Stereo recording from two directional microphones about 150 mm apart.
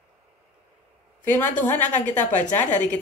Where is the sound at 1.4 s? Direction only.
55° left (ahead or behind).